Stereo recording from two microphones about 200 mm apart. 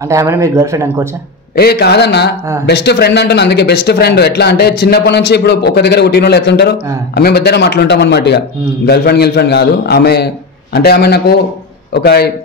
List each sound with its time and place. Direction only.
0.1 s speech: 15° right (ahead or behind)
1.6 s a man's voice: 55° left (ahead or behind)